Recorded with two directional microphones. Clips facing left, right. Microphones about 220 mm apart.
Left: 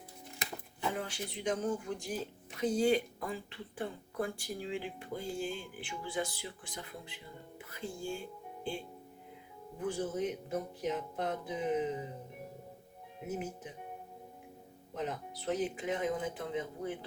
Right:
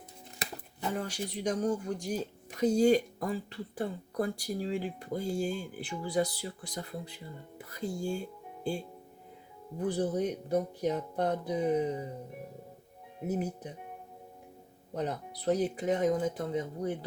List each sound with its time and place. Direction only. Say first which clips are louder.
0.9 s speech: right 4 dB; 40° right (ahead or behind)
13.2 s speech: right 6 dB; 35° right (ahead or behind)
14.9 s speech: right 4 dB; 40° right (ahead or behind)